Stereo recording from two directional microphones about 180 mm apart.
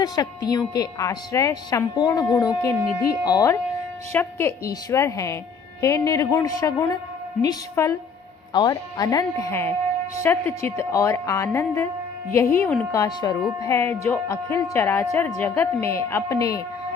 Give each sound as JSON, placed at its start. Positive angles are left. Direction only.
{"t": 0.0, "sound": "a woman's voice", "side_deg": 20}
{"t": 12.9, "sound": "a woman's voice", "side_deg": 20}